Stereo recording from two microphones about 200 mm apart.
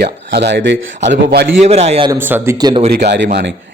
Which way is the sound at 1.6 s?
30° right (ahead or behind).